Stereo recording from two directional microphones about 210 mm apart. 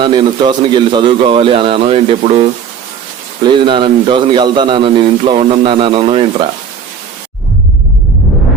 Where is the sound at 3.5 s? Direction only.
25° right (ahead or behind).